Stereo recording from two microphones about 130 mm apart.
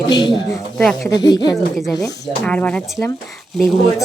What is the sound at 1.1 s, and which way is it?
Speech, 30° left (ahead or behind).